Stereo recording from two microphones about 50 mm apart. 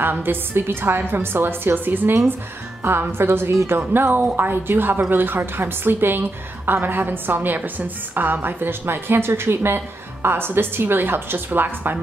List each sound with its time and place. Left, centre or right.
0.0 s a woman's voice: right